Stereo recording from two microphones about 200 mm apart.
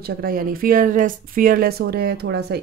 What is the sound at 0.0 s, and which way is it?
Speech, 45° right (ahead or behind).